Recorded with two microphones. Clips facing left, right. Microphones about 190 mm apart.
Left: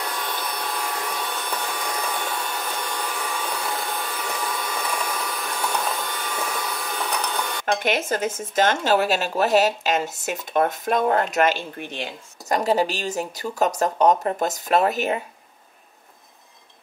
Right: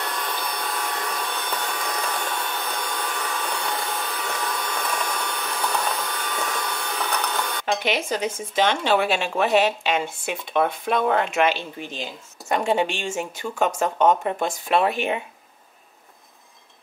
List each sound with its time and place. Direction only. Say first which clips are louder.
0.0 s hair dryer: even; centre (ahead or behind)
7.8 s speech: left 1 dB; 50° left (ahead or behind)
11.8 s speech: left 1 dB; 65° left (ahead or behind)
12.8 s speech: left 1 dB; 40° left (ahead or behind)
13.8 s speech: left 1 dB; centre (ahead or behind)
14.4 s speech: left 1 dB; 40° left (ahead or behind)